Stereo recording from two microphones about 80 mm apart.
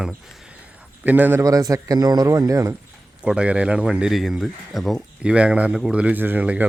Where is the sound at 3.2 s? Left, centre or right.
Centre.